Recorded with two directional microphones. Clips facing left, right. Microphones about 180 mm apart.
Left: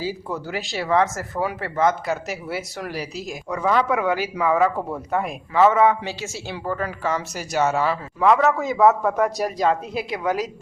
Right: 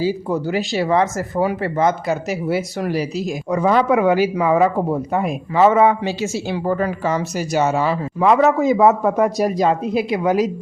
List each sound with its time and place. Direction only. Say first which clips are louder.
0.0 s a man's voice: right 8 dB; 20° right (ahead or behind)
7.7 s a man's voice: right 3 dB; 10° right (ahead or behind)